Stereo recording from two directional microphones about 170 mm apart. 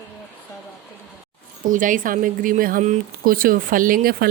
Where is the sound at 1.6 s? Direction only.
50° right (ahead or behind).